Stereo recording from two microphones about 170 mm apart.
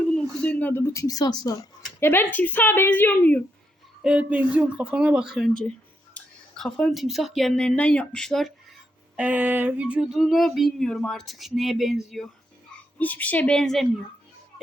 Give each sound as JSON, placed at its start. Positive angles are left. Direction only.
{"t": 0.4, "sound": "a woman's voice", "side_deg": 10}
{"t": 4.0, "sound": "speech", "side_deg": -5}
{"t": 9.1, "sound": "a sound", "side_deg": -10}
{"t": 13.0, "sound": "a woman's voice", "side_deg": 10}